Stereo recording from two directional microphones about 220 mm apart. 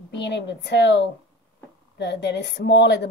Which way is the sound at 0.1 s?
50° left (ahead or behind).